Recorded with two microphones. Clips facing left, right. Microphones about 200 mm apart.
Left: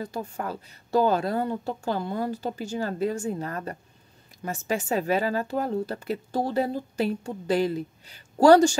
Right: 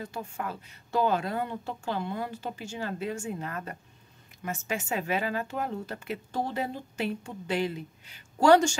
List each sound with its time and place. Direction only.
0.0 s speech: 35° left (ahead or behind)